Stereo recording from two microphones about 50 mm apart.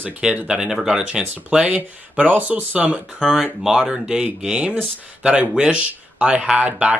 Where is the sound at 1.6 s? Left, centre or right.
Right.